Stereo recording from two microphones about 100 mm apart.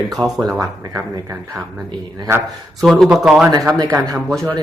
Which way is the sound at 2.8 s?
5° left (ahead or behind).